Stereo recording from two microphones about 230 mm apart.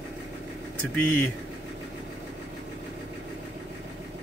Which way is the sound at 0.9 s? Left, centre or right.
Centre.